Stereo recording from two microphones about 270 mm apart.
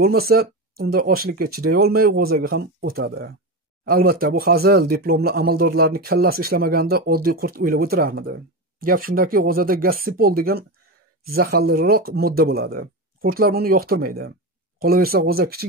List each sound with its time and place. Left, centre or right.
0.0 s speech: right